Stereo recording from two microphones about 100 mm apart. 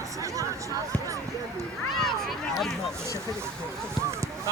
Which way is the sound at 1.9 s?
5° left (ahead or behind).